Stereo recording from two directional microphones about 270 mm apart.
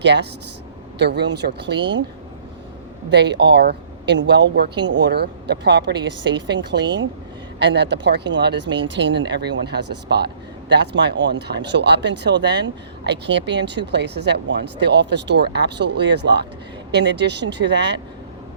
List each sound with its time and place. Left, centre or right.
0.0 s speech: right
3.1 s speech: right
7.6 s speech: right